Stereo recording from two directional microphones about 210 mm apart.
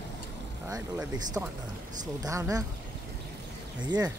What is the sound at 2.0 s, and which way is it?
Speech, 15° right (ahead or behind).